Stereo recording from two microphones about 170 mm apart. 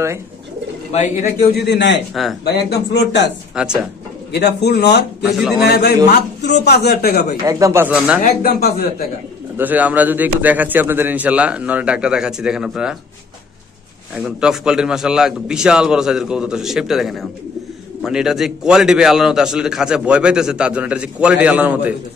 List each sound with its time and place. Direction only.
0.9 s a man's voice: 45° left (ahead or behind)
1.5 s speech: 75° left (ahead or behind)
2.4 s speech: 70° left (ahead or behind); by 3.3 s 90° left
3.6 s a man's voice: 5° right (ahead or behind)
4.3 s speech: 80° left
5.2 s a man's voice: centre (ahead or behind)
5.6 s a man's voice: 70° left (ahead or behind)
7.4 s a man's voice: 15° right (ahead or behind)
8.2 s speech: 60° left (ahead or behind)
9.6 s a man's voice: 10° right (ahead or behind)
14.1 s a man's voice: 5° right (ahead or behind)